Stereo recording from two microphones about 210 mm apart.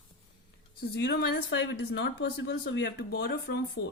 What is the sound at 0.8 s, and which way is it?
Speech, 50° left (ahead or behind).